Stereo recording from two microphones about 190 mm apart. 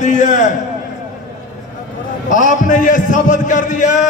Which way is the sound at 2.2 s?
40° left (ahead or behind).